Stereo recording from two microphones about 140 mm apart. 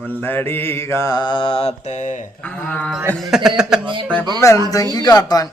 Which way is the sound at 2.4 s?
10° left (ahead or behind).